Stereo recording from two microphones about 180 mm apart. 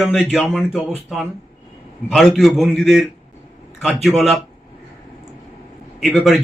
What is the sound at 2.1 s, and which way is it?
A man's voice, centre (ahead or behind).